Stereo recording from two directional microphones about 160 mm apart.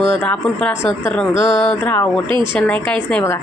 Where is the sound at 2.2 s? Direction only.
30° right (ahead or behind).